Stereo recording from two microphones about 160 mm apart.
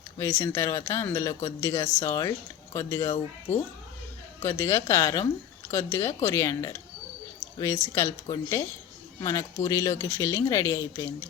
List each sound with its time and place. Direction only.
0.2 s speech: 15° left (ahead or behind)